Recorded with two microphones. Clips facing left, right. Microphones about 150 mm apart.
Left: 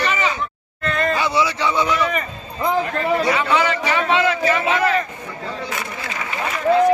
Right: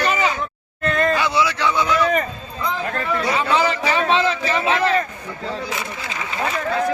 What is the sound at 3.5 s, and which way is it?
A man's voice, 30° right (ahead or behind).